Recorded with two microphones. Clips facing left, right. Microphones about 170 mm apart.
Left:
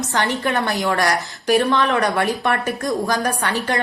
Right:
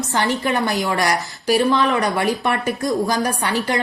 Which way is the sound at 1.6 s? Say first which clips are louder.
Right 1 dB; 5° right (ahead or behind).